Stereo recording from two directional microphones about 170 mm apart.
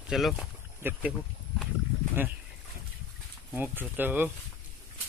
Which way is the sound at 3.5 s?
10° right (ahead or behind).